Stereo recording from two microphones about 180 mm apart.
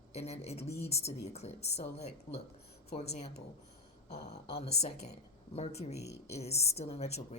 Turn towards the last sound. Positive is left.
turn(degrees=35)  # may be behind; listen again after turning